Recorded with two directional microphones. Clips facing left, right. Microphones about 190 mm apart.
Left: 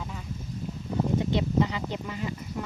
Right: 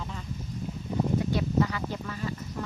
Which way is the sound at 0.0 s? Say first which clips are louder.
Even; 5° left (ahead or behind).